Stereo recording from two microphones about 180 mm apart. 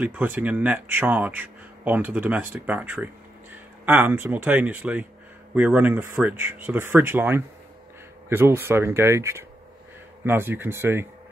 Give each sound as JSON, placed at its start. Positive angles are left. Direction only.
{"t": 0.0, "sound": "speech", "side_deg": -10}